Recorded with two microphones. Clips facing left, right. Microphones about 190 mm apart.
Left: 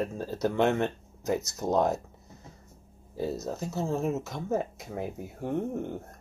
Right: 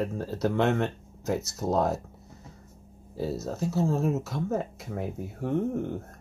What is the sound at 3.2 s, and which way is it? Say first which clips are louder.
Speech: right 1 dB; 5° right (ahead or behind).